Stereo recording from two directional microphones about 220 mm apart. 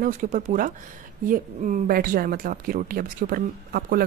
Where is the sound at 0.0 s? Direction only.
35° right (ahead or behind).